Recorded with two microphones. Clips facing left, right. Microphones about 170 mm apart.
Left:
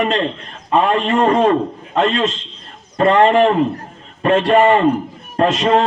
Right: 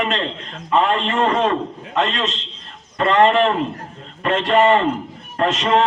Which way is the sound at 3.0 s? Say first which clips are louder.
Left 3 dB; 35° left (ahead or behind).